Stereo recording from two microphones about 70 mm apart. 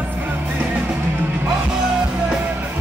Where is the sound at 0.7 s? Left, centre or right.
Centre.